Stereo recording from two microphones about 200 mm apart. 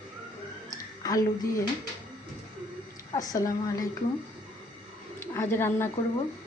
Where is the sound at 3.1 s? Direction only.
15° left (ahead or behind).